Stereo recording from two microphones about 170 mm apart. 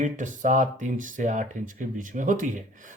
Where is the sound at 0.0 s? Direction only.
45° right (ahead or behind).